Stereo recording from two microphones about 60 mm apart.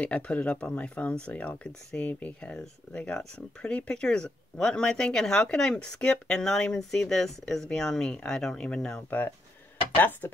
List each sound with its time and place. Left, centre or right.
0.0 s speech: left
9.9 s speech: left